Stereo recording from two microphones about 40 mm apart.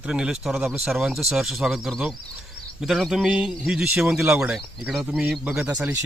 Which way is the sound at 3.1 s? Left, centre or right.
Centre.